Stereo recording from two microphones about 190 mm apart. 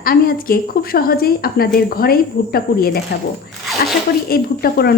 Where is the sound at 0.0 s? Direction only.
50° left (ahead or behind).